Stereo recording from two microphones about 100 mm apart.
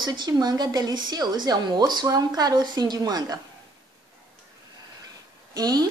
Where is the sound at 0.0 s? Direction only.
45° right (ahead or behind).